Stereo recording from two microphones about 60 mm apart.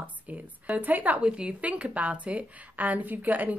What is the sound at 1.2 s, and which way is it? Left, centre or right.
A woman's voice, centre.